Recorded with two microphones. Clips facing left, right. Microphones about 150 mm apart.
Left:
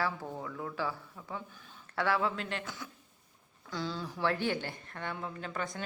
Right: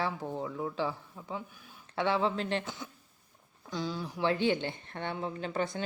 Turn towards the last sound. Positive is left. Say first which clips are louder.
# right 5 dB
turn(degrees=-30)  # may be behind; listen again after turning